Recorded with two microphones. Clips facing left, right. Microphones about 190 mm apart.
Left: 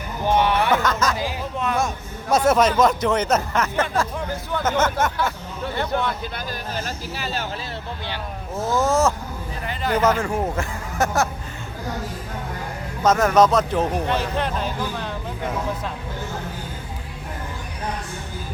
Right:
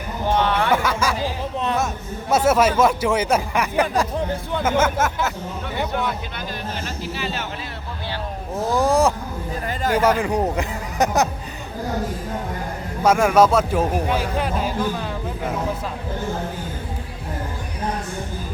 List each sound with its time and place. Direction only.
0.3 s a sound: 10° left (ahead or behind)
0.7 s speech: 10° right (ahead or behind)
2.3 s speech: 5° right (ahead or behind)
6.7 s speech: 40° left (ahead or behind)
8.7 s speech: 15° right (ahead or behind)
13.0 s speech: 10° right (ahead or behind)